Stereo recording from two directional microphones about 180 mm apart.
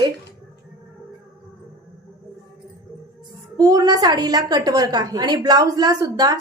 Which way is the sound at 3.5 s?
20° right (ahead or behind).